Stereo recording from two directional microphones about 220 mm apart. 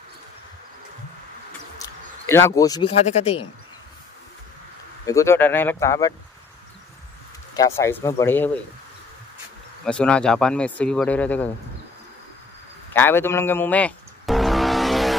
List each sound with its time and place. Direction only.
1.8 s a sound: 10° left (ahead or behind)
3.1 s speech: 30° left (ahead or behind)
5.0 s speech: 15° left (ahead or behind)
7.5 s speech: 15° left (ahead or behind)
9.8 s speech: 5° left (ahead or behind)
12.9 s music: 10° left (ahead or behind)